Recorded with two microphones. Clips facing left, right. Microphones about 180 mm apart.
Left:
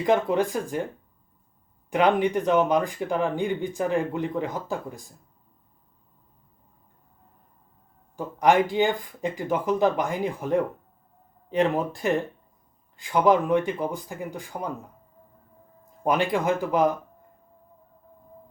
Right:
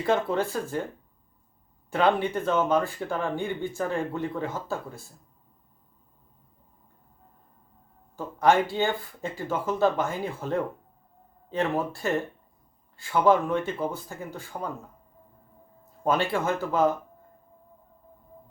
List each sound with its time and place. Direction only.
0.0 s speech: 15° left (ahead or behind)
1.9 s speech: 15° left (ahead or behind)
8.1 s speech: 15° left (ahead or behind)
15.9 s speech: 15° left (ahead or behind)